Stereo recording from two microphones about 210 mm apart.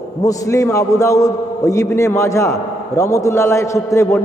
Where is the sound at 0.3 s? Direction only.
15° left (ahead or behind).